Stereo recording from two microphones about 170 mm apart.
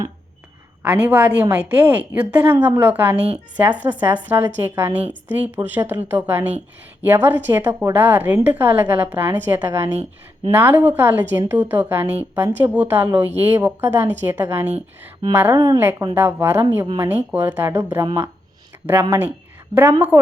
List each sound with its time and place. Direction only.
0.8 s a woman's voice: 10° right (ahead or behind)